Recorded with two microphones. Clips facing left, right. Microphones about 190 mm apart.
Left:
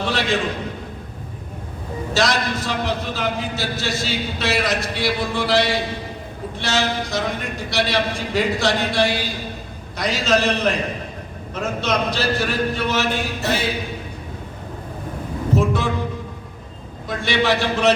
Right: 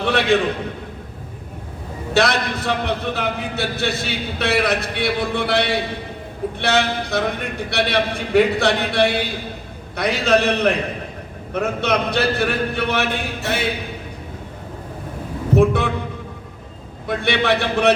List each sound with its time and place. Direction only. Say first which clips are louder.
0.0 s a sound: right 4 dB; 60° right (ahead or behind)
2.1 s a man's voice: right 2 dB; 60° right (ahead or behind)
15.5 s speech: right 5 dB; 60° right (ahead or behind)
17.1 s a man's voice: right 1 dB; 60° right (ahead or behind)